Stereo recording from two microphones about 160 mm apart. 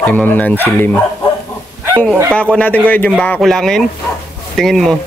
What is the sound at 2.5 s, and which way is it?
Speech, 10° left (ahead or behind).